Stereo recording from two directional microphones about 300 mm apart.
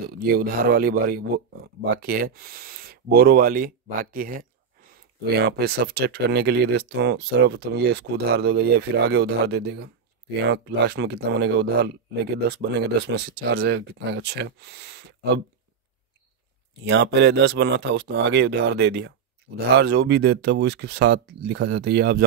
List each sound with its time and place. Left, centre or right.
0.2 s speech: right
16.8 s speech: right